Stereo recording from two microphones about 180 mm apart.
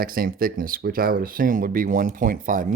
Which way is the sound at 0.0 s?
55° right (ahead or behind).